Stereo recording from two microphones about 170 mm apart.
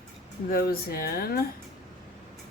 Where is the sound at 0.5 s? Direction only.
60° left (ahead or behind).